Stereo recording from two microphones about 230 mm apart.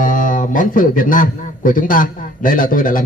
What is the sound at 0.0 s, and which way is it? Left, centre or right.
A man's voice, left.